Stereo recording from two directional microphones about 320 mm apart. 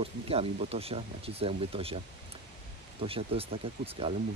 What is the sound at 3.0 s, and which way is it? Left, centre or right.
Speech, centre.